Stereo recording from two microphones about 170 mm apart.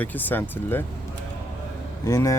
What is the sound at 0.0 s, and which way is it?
Speech, 10° left (ahead or behind).